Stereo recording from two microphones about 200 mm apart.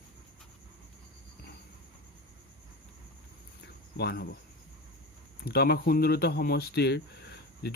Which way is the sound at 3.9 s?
55° left (ahead or behind).